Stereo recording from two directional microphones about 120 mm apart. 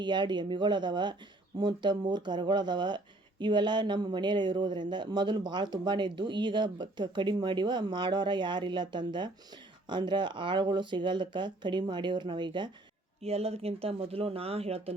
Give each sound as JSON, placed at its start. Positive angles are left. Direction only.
{"t": 0.0, "sound": "speech", "side_deg": -40}
{"t": 13.2, "sound": "speech", "side_deg": -60}